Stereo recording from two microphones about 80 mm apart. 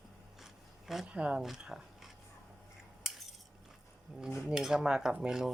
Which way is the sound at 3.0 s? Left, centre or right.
Centre.